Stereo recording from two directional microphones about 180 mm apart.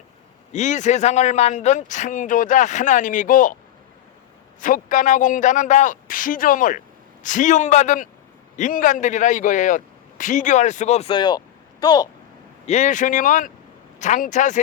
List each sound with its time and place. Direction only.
0.5 s a woman's voice: 40° left (ahead or behind)
4.6 s a woman's voice: 45° left (ahead or behind); by 12.0 s 20° left (ahead or behind)
12.6 s a woman's voice: 40° left (ahead or behind)